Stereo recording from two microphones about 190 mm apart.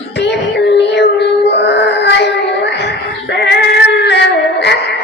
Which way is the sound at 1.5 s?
65° left (ahead or behind).